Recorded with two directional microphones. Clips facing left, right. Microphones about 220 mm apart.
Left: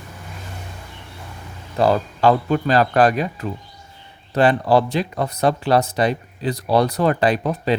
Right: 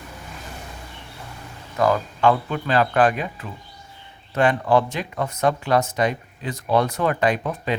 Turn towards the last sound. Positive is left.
turn(degrees=35)  # may be behind; listen again after turning